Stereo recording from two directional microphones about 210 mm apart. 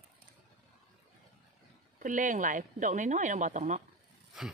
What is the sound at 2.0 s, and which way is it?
Speech, 40° right (ahead or behind).